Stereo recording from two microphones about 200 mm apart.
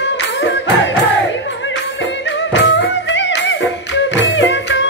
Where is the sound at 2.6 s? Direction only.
60° left (ahead or behind).